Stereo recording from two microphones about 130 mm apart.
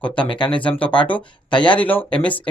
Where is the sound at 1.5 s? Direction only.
35° left (ahead or behind).